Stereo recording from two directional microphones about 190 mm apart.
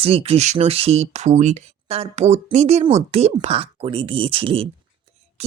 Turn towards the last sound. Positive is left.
turn(degrees=-30)  # may be behind; listen again after turning